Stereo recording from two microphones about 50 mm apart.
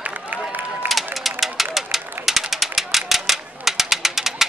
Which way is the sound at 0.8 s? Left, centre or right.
Centre.